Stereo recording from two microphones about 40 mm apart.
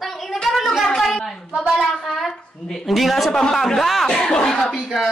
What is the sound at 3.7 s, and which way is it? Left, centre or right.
Speech, centre.